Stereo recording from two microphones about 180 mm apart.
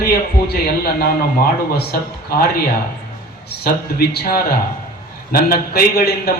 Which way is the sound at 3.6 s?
60° left (ahead or behind).